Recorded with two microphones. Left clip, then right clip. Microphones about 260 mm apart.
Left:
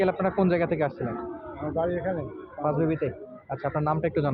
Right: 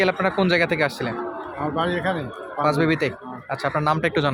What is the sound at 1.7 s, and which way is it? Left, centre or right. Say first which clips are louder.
Speech: right 3 dB; right.